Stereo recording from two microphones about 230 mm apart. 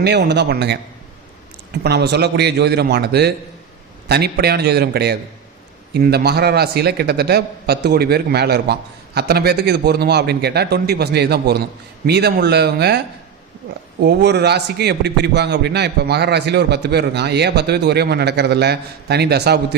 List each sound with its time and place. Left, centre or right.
0.0 s a man's voice: right
1.8 s a man's voice: right
14.0 s a man's voice: right